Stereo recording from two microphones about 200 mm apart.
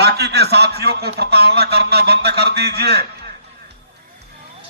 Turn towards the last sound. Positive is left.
turn(degrees=-55)  # may be behind; listen again after turning